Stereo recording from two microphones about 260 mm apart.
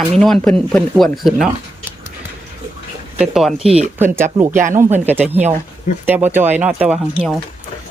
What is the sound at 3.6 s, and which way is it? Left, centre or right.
Speech, right.